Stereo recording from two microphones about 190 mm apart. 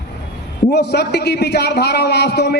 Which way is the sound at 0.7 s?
60° left (ahead or behind).